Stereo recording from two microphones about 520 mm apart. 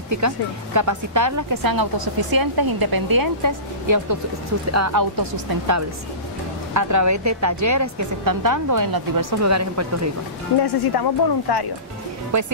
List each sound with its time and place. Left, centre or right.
0.7 s a woman's voice: right
10.6 s speech: left
12.3 s speech: right